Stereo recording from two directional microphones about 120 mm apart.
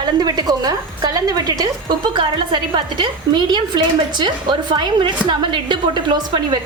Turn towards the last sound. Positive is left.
turn(degrees=-40)  # may be behind; listen again after turning